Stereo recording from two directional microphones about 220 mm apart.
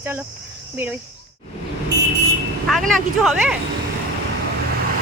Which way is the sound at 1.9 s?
50° right (ahead or behind).